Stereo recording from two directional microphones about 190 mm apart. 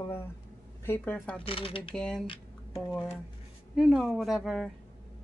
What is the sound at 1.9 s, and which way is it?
Speech, 5° left (ahead or behind).